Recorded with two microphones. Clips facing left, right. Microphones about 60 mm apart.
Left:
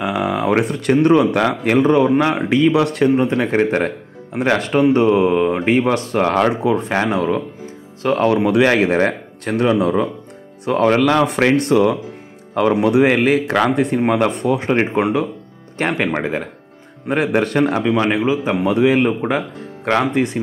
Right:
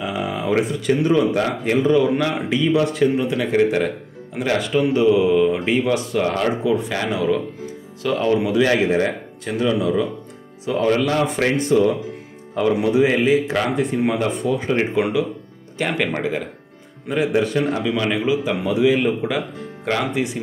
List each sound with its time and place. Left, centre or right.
0.0 s speech: left
2.7 s speech: left
3.2 s speech: left
8.5 s speech: left
15.9 s speech: left
17.1 s speech: left
17.8 s speech: left
18.7 s speech: left